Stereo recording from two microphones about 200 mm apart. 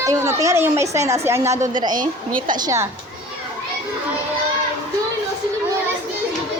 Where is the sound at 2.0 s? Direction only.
40° right (ahead or behind).